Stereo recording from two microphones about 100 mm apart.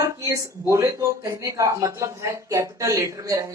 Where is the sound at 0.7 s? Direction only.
35° right (ahead or behind).